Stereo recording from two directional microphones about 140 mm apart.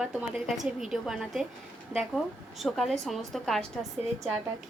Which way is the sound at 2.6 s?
Centre (ahead or behind).